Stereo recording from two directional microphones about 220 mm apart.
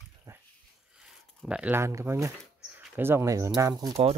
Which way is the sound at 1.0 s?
5° right (ahead or behind).